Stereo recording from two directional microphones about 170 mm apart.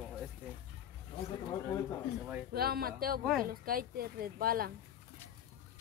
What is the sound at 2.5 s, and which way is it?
Speech, 65° right (ahead or behind).